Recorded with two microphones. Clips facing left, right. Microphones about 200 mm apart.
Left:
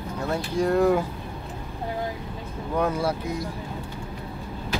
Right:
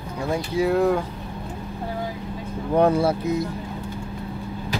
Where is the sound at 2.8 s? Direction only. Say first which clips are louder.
Right 6 dB; 30° right (ahead or behind).